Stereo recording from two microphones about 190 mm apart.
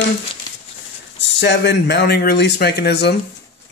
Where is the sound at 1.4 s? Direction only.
60° left (ahead or behind).